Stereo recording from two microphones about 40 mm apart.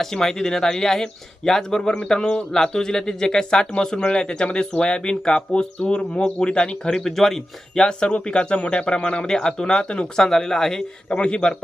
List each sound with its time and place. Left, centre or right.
0.0 s speech: centre
6.9 s speech: centre
7.9 s speech: left
10.2 s speech: centre
11.2 s speech: left